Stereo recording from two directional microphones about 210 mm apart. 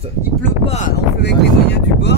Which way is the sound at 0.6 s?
30° left (ahead or behind).